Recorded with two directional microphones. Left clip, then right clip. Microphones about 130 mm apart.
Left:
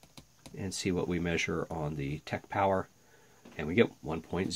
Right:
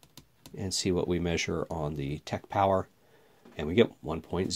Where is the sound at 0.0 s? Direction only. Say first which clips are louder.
Even; 5° right (ahead or behind).